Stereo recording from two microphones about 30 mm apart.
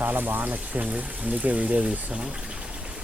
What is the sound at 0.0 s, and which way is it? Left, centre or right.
Speech, right.